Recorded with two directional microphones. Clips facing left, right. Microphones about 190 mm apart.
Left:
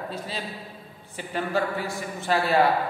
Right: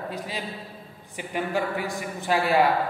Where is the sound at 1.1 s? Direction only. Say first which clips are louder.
Even; 15° right (ahead or behind).